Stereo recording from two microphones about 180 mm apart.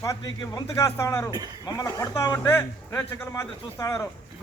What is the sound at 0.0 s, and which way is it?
A man's voice, 20° left (ahead or behind).